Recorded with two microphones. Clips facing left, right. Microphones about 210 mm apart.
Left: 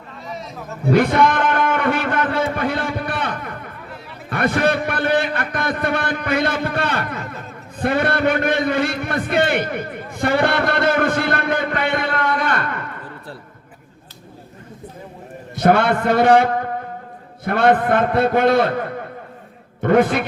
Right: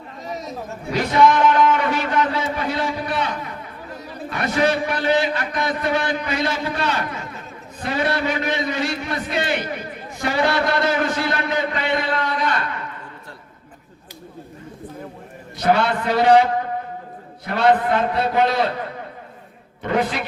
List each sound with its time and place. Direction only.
0.9 s a man's voice: 55° left (ahead or behind)
15.5 s a man's voice: 50° left (ahead or behind)